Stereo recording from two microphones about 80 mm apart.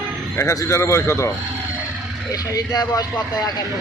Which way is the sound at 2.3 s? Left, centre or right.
Left.